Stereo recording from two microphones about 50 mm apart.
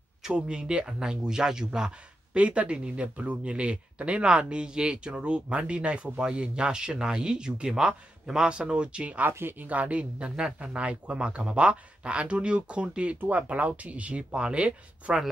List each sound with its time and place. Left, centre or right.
0.2 s speech: centre
2.3 s speech: right
9.3 s speech: right
9.7 s speech: right